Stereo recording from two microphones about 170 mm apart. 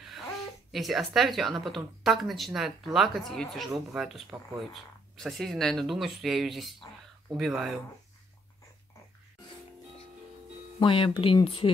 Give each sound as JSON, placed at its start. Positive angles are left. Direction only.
{"t": 0.7, "sound": "speech", "side_deg": 0}
{"t": 10.8, "sound": "speech", "side_deg": 30}